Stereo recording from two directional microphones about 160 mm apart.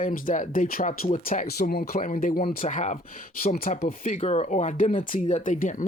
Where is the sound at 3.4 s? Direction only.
65° left (ahead or behind).